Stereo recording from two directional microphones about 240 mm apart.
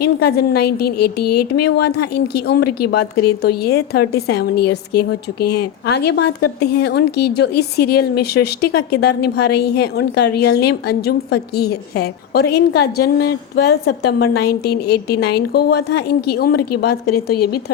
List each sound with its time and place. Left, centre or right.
0.0 s a woman's voice: left